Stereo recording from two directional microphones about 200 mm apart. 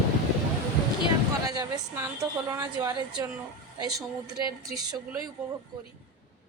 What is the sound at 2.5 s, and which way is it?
Speech, 15° right (ahead or behind).